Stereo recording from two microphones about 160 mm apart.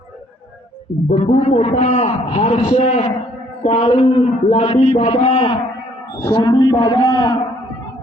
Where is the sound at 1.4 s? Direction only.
40° left (ahead or behind).